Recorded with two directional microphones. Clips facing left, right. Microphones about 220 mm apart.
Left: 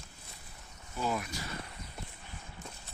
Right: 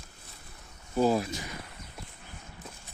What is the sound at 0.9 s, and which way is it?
Speech, 35° right (ahead or behind).